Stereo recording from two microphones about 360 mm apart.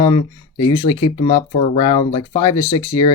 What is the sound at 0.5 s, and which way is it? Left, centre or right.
Speech, left.